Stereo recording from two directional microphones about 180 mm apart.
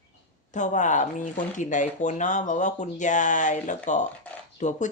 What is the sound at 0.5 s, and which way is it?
Speech, 45° left (ahead or behind).